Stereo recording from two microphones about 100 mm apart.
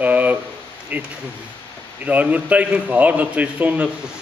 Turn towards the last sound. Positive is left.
turn(degrees=-15)  # may be behind; listen again after turning